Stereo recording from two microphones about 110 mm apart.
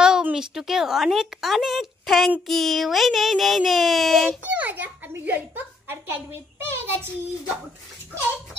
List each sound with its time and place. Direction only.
0.0 s a woman's voice: 10° right (ahead or behind)
4.5 s a child's voice: 15° right (ahead or behind)